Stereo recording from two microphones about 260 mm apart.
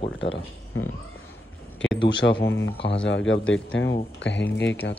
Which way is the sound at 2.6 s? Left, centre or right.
Left.